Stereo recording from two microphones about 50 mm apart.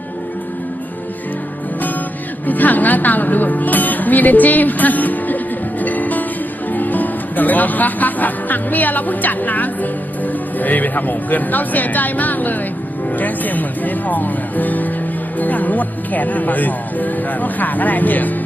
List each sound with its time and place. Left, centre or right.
2.5 s speech: left
5.8 s music: left
6.7 s speech: left